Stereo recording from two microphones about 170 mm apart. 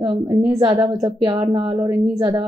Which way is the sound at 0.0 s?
20° right (ahead or behind).